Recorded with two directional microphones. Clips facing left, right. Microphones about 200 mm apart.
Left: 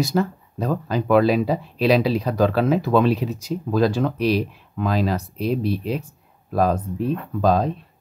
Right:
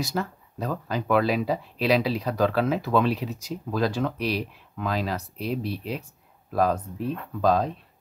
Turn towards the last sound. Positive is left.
turn(degrees=35)  # may be behind; listen again after turning